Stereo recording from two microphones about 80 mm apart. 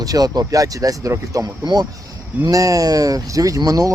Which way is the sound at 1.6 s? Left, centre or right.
Right.